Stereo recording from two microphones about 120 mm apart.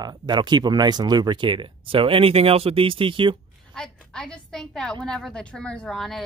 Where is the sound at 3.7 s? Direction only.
5° left (ahead or behind).